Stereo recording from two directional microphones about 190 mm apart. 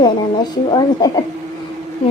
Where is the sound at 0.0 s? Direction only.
25° left (ahead or behind).